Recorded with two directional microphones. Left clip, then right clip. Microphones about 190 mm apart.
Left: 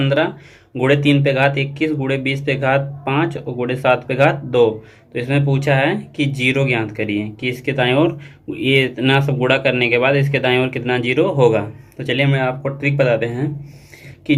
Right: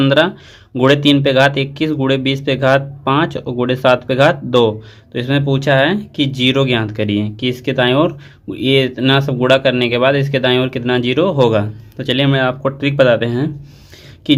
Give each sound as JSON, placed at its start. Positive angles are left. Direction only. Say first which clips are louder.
{"t": 0.0, "sound": "speech", "louder": "right 5 dB", "side_deg": -50}